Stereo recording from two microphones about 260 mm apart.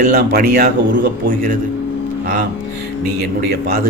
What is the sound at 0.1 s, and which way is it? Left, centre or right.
Speech, right.